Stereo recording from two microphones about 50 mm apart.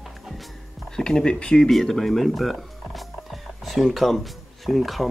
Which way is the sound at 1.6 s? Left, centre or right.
Centre.